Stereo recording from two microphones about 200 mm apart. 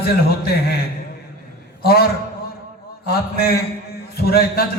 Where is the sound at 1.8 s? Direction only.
50° left (ahead or behind).